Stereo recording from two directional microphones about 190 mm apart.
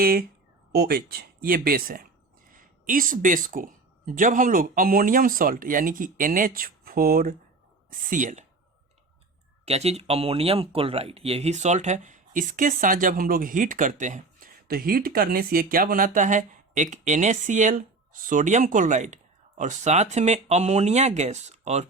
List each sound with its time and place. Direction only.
0.0 s speech: 50° right (ahead or behind)
9.6 s speech: 35° right (ahead or behind)